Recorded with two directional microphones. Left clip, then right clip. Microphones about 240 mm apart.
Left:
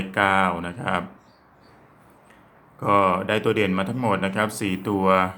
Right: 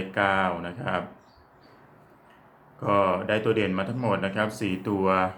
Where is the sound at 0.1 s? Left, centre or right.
Left.